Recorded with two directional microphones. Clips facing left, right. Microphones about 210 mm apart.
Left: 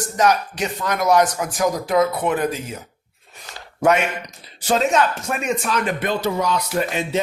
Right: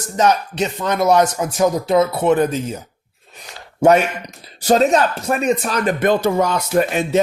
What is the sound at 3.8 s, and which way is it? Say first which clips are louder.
Speech: right 5 dB; 30° right (ahead or behind).